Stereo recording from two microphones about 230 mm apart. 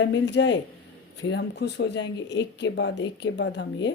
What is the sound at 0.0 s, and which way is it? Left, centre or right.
Speech, left.